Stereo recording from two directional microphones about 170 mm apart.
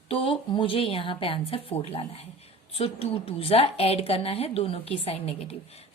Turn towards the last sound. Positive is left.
turn(degrees=40)  # may be behind; listen again after turning